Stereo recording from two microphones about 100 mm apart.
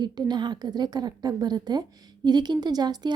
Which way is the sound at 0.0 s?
45° right (ahead or behind).